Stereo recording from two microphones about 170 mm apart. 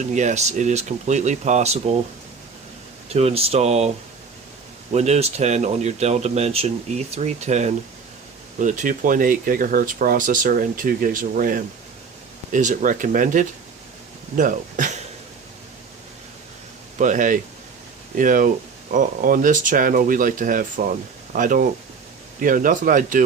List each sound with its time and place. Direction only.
0.1 s speech: 45° right (ahead or behind)
3.1 s speech: 40° right (ahead or behind)
17.0 s speech: 50° right (ahead or behind)